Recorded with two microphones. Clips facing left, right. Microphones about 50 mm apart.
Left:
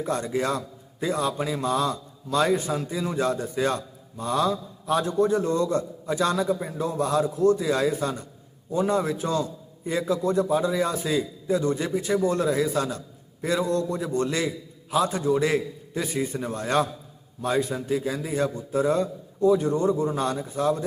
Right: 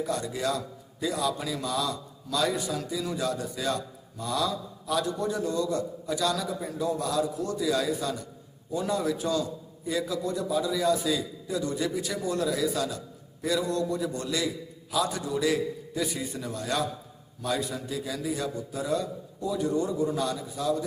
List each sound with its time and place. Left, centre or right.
0.0 s a man's voice: left